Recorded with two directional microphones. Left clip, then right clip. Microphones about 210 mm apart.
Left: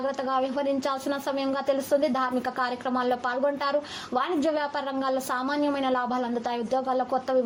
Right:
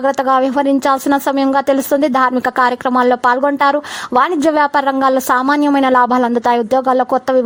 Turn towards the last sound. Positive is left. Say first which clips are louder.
# right 13 dB
turn(degrees=-50)  # may be behind; listen again after turning